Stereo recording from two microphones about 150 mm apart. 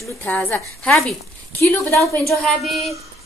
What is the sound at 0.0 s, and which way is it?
A woman's voice, 15° left (ahead or behind).